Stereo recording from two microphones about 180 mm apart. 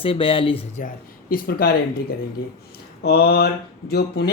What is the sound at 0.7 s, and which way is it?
Speech, 50° left (ahead or behind).